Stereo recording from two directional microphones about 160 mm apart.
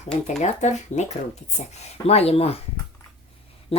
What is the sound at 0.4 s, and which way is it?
Speech, 45° left (ahead or behind).